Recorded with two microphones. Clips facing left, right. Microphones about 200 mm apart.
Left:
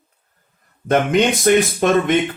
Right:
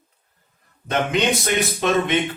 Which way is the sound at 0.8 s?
50° left (ahead or behind).